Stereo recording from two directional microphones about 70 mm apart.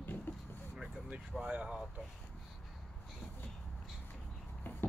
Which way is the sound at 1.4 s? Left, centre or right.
Centre.